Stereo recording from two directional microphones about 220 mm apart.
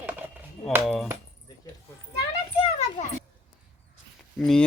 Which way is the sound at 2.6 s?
25° left (ahead or behind).